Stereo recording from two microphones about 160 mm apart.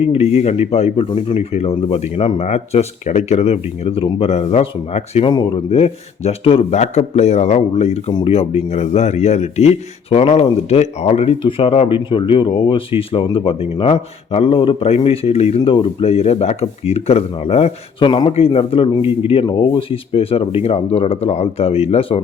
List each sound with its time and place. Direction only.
0.0 s speech: 40° left (ahead or behind)
5.3 s speech: 25° left (ahead or behind)
5.7 s speech: 40° left (ahead or behind)